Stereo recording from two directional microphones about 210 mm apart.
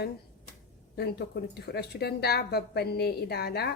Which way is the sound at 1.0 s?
50° left (ahead or behind).